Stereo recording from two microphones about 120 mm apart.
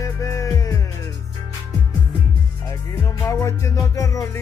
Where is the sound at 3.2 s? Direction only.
25° left (ahead or behind).